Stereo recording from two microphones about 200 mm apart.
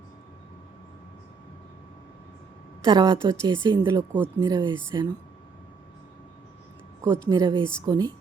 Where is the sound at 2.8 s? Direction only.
20° right (ahead or behind).